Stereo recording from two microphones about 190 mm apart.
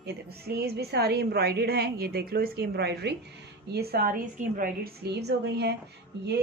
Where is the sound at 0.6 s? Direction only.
55° right (ahead or behind).